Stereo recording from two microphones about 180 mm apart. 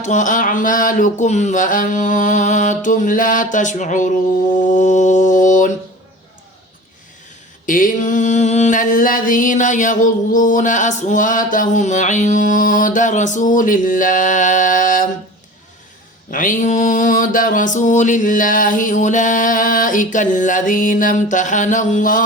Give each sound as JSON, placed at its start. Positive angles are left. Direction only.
{"t": 0.0, "sound": "mantra", "side_deg": 45}
{"t": 7.7, "sound": "mantra", "side_deg": 45}
{"t": 16.3, "sound": "mantra", "side_deg": 50}